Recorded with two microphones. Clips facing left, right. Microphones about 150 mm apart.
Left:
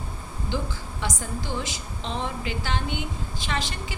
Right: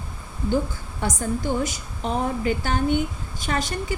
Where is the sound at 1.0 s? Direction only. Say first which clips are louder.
Right 7 dB; 45° right (ahead or behind).